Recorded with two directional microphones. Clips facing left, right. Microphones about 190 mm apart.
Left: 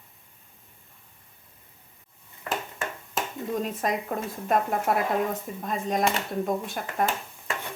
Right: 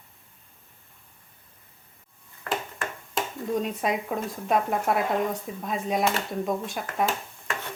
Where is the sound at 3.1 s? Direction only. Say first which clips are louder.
Right 2 dB; centre (ahead or behind).